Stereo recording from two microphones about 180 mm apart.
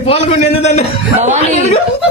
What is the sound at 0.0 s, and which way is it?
Speech, 35° left (ahead or behind).